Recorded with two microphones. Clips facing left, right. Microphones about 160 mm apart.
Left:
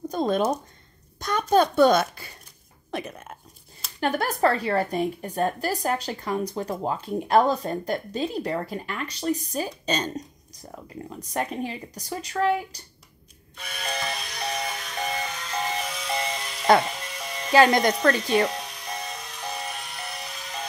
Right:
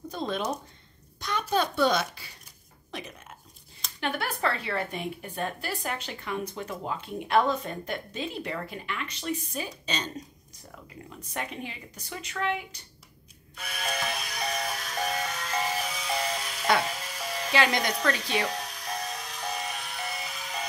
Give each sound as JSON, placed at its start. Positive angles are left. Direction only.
{"t": 0.1, "sound": "speech", "side_deg": 45}
{"t": 2.9, "sound": "a sound", "side_deg": 50}
{"t": 4.0, "sound": "a woman's voice", "side_deg": 40}
{"t": 13.6, "sound": "a sound", "side_deg": 0}
{"t": 16.8, "sound": "music", "side_deg": 0}
{"t": 17.5, "sound": "speech", "side_deg": 45}
{"t": 18.5, "sound": "music", "side_deg": 0}